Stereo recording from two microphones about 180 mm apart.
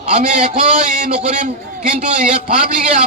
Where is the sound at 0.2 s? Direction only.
40° right (ahead or behind).